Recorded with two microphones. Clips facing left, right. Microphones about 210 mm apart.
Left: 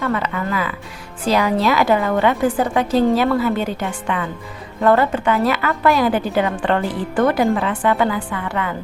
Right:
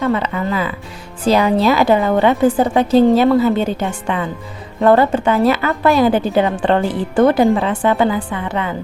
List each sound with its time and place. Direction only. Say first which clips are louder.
0.0 s a woman's voice: right 4 dB; 25° right (ahead or behind)